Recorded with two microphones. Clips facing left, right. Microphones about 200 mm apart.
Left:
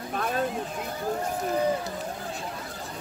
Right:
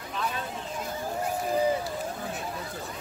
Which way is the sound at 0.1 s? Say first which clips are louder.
Left 3 dB; 50° left (ahead or behind).